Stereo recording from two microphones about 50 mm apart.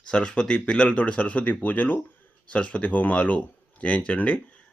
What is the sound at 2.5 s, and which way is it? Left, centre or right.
Speech, left.